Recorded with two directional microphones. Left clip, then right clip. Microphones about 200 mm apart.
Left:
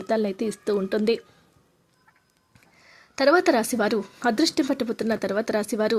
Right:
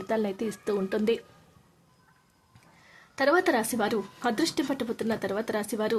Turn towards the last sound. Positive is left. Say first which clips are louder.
# left 5 dB
turn(degrees=20)  # may be behind; listen again after turning